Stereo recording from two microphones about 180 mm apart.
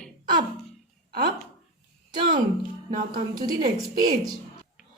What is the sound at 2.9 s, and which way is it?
Speech, 45° right (ahead or behind).